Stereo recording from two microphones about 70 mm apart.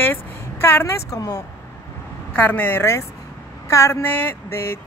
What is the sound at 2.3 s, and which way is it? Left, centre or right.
Speech, left.